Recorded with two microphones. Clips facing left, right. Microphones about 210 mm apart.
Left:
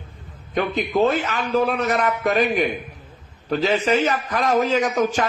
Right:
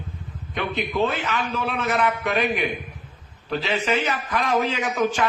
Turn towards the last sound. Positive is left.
turn(degrees=40)  # may be behind; listen again after turning